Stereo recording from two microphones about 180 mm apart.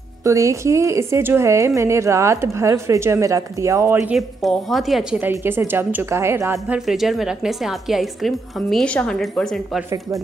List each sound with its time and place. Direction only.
0.2 s a woman's voice: 15° right (ahead or behind); by 5.3 s centre (ahead or behind)
5.3 s a woman's voice: 15° right (ahead or behind)
6.9 s a woman's voice: centre (ahead or behind)